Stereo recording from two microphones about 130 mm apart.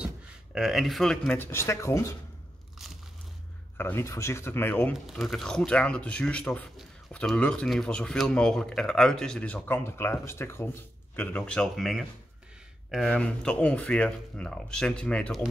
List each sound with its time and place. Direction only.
0.6 s speech: centre (ahead or behind); by 2.1 s 20° left (ahead or behind)
3.7 s speech: 15° left (ahead or behind); by 12.1 s centre (ahead or behind)
13.1 s speech: 5° left (ahead or behind)